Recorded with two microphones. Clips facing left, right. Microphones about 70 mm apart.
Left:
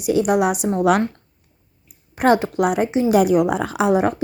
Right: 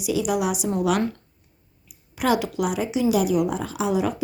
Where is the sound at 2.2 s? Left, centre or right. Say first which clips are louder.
Left 6 dB; left.